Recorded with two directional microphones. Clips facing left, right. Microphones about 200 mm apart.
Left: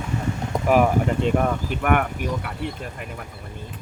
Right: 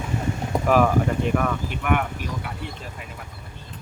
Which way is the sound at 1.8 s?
50° left (ahead or behind).